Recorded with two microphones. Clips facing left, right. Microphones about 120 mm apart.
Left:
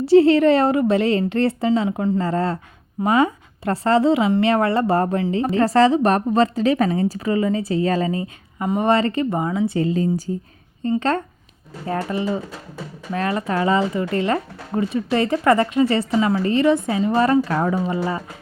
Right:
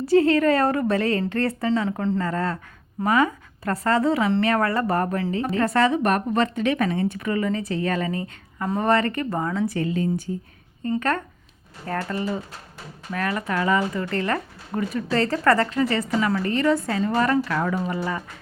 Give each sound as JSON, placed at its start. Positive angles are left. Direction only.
{"t": 0.0, "sound": "a woman's voice", "side_deg": 30}
{"t": 2.2, "sound": "a woman's voice", "side_deg": 30}
{"t": 9.7, "sound": "a woman's voice", "side_deg": 30}